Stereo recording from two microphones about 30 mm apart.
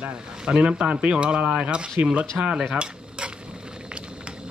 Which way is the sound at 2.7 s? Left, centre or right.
Right.